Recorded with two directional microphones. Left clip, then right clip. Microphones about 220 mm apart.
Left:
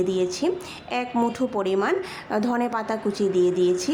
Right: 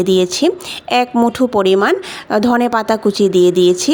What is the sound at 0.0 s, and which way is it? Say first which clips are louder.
A woman's voice: right 10 dB; 40° right (ahead or behind).